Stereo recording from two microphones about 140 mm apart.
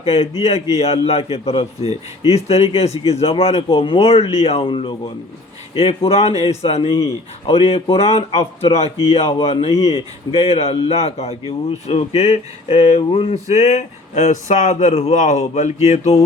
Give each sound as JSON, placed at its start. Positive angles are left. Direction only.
{"t": 0.0, "sound": "a man's voice", "side_deg": 45}